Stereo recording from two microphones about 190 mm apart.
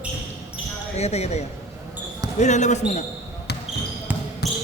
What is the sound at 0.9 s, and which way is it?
Speech, 35° left (ahead or behind).